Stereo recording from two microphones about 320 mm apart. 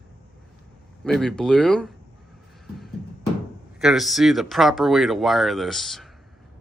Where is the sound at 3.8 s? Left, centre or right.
Centre.